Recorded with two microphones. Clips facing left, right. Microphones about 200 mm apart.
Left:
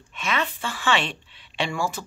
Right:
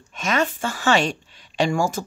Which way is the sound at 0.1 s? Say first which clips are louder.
Right 5 dB; 45° right (ahead or behind).